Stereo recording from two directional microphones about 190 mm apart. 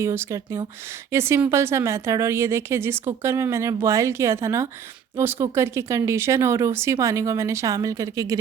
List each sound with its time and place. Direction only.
0.0 s speech: 15° right (ahead or behind)